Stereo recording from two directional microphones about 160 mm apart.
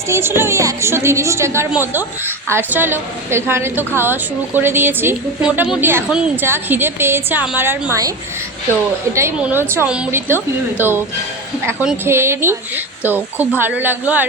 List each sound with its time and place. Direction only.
0.1 s a woman's voice: 15° right (ahead or behind)
9.1 s a woman's voice: 15° right (ahead or behind)